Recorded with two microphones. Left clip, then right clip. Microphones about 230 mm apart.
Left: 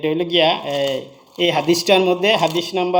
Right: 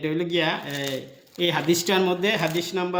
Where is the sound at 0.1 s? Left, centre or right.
Centre.